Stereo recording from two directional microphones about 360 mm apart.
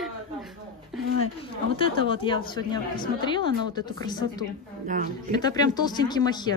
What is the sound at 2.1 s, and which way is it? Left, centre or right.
Speech, centre.